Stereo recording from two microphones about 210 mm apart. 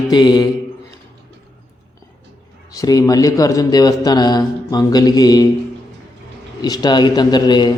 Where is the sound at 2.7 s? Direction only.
15° left (ahead or behind).